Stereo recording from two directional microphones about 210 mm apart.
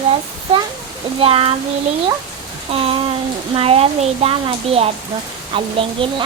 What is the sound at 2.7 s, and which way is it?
Speech, 25° right (ahead or behind).